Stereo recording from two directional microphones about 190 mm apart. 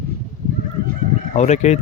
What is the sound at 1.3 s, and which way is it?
Speech, 35° left (ahead or behind).